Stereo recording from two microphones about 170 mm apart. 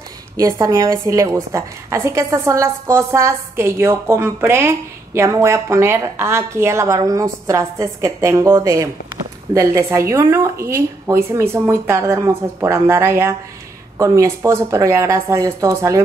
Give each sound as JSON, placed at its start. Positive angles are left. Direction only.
{"t": 0.4, "sound": "a woman's voice", "side_deg": -20}